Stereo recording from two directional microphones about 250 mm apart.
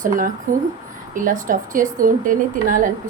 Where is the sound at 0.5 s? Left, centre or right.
Right.